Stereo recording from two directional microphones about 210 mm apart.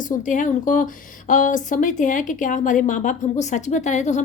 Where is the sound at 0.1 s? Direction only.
40° left (ahead or behind).